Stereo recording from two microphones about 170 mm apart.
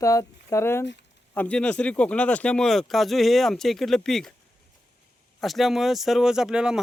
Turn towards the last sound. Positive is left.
turn(degrees=-5)  # may be behind; listen again after turning